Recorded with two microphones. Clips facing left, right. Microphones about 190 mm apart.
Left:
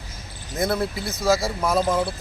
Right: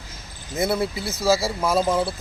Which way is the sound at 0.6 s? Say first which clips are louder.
Right 1 dB; 5° right (ahead or behind).